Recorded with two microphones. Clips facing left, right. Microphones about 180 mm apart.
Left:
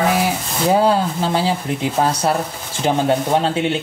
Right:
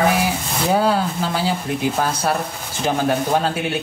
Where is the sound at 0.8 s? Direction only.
25° left (ahead or behind).